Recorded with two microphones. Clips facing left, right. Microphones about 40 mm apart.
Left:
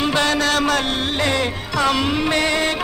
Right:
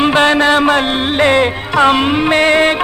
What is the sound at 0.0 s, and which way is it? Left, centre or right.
Music, right.